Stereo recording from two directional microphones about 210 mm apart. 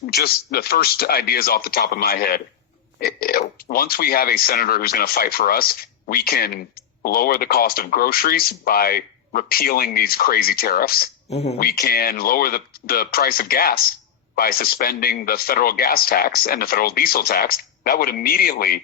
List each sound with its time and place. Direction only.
0.0 s speech: 50° left (ahead or behind)
11.3 s speech: 30° left (ahead or behind)
11.5 s speech: 45° left (ahead or behind)